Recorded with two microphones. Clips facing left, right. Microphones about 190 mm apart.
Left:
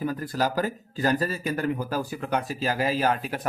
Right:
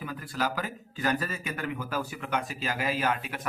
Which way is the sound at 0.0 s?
40° left (ahead or behind).